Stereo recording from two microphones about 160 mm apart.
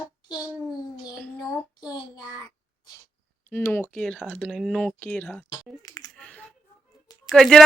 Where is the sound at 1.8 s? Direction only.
25° left (ahead or behind).